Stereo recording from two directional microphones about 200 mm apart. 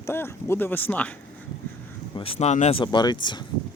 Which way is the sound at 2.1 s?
30° left (ahead or behind).